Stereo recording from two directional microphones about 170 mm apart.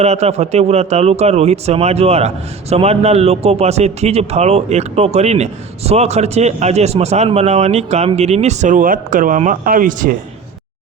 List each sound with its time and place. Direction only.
0.0 s speech: 40° right (ahead or behind)